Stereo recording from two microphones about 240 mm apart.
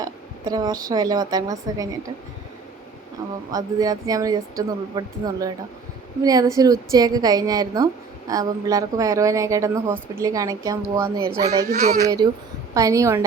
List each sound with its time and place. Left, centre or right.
0.0 s a woman's voice: centre
3.5 s a woman's voice: centre
11.7 s speech: right
12.0 s a woman's voice: centre